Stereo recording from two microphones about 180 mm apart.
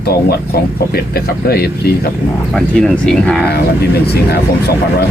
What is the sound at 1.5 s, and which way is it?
Speech, 60° left (ahead or behind).